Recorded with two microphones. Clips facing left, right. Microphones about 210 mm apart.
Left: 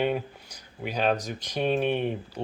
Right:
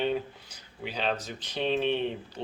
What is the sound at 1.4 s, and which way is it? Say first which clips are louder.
Speech: left 3 dB; 10° left (ahead or behind).